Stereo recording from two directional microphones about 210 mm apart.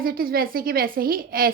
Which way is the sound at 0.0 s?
45° right (ahead or behind).